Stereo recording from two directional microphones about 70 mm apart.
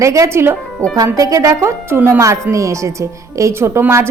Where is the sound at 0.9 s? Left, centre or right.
Right.